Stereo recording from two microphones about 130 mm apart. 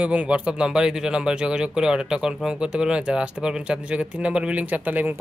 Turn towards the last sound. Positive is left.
turn(degrees=-15)  # may be behind; listen again after turning